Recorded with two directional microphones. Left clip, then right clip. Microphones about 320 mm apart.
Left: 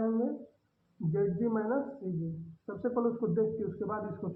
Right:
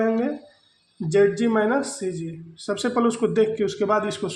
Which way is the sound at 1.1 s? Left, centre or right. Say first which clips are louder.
Right 12 dB; right.